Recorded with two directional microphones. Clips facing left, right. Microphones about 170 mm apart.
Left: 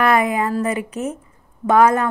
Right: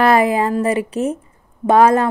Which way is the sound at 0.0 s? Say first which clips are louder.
Right 3 dB; 30° right (ahead or behind).